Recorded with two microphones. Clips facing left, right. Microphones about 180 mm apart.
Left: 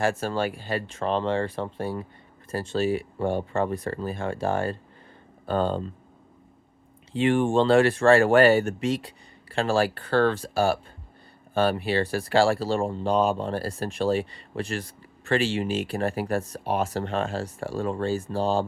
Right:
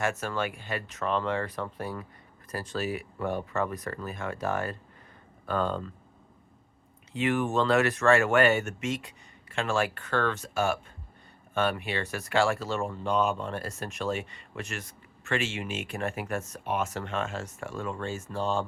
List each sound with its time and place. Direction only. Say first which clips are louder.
0.0 s speech: left 5 dB; 30° left (ahead or behind)
7.1 s speech: left 6 dB; 30° left (ahead or behind)